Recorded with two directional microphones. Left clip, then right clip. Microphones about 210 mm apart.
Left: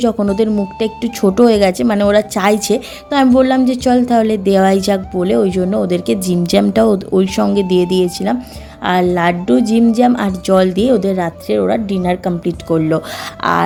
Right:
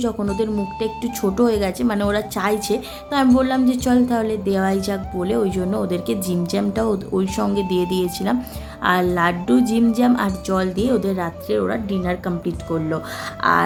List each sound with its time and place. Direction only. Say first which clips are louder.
0.0 s a woman's voice: left 8 dB; 30° left (ahead or behind)